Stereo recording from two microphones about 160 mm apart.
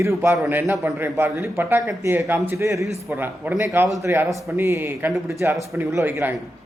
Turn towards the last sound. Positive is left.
turn(degrees=-15)  # may be behind; listen again after turning